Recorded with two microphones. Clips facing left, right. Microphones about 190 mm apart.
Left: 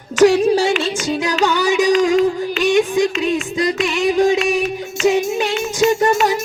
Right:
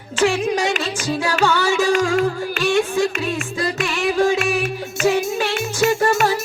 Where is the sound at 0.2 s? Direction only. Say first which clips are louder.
Left 7 dB; 40° left (ahead or behind).